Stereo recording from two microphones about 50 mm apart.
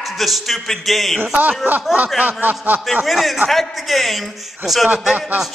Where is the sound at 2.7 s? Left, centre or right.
Right.